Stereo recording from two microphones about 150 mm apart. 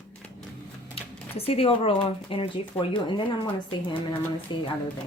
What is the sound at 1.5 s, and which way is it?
Speech, 40° left (ahead or behind).